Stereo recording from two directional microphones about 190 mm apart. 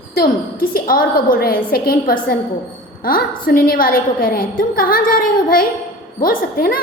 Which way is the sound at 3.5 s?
50° left (ahead or behind).